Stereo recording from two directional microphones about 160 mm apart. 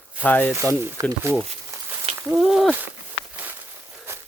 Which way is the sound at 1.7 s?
20° right (ahead or behind).